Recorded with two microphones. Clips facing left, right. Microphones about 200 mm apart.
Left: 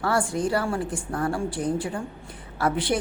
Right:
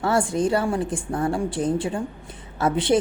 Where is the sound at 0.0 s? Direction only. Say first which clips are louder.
Right 3 dB; 20° right (ahead or behind).